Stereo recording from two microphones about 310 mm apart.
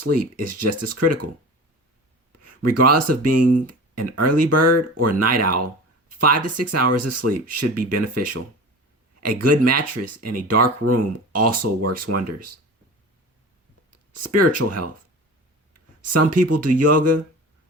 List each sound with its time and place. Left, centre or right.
0.0 s speech: right
2.4 s speech: right
9.4 s speech: right
13.9 s speech: right
16.4 s speech: right